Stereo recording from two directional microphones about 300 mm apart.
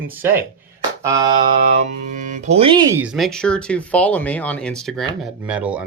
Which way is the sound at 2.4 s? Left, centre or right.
Right.